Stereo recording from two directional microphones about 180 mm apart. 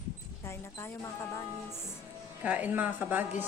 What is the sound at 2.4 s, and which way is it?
Speech, 10° right (ahead or behind).